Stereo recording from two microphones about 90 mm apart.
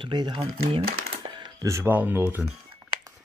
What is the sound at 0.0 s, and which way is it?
Speech, 60° right (ahead or behind).